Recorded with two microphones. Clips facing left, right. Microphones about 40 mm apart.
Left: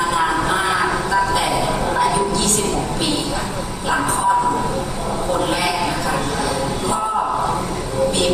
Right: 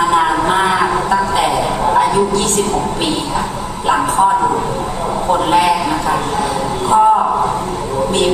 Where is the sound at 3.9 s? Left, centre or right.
Right.